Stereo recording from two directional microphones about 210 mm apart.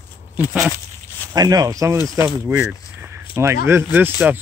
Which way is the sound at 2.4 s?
10° right (ahead or behind).